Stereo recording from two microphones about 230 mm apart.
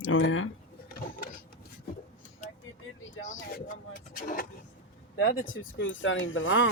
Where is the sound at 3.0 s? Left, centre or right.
Left.